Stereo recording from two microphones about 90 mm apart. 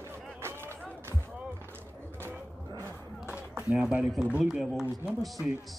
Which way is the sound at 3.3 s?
15° right (ahead or behind).